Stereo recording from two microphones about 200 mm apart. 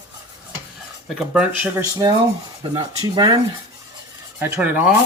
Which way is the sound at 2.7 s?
25° right (ahead or behind).